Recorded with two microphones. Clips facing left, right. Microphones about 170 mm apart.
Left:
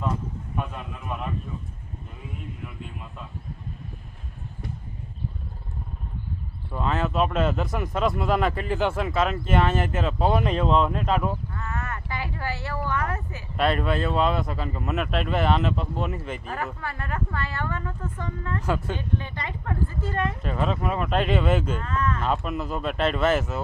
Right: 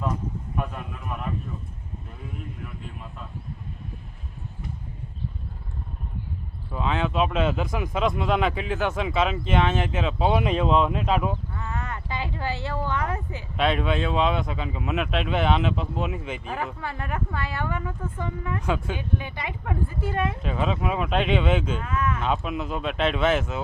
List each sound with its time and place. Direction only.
6.7 s speech: centre (ahead or behind)
9.0 s speech: centre (ahead or behind)
13.6 s speech: centre (ahead or behind)
16.6 s speech: 15° right (ahead or behind)
18.6 s speech: centre (ahead or behind)
18.9 s speech: 10° right (ahead or behind); by 21.8 s 5° left (ahead or behind)
21.8 s speech: 10° right (ahead or behind)